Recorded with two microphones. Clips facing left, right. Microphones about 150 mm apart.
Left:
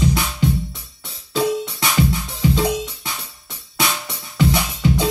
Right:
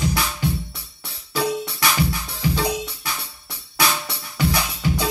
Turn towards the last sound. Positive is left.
turn(degrees=20)  # may be behind; listen again after turning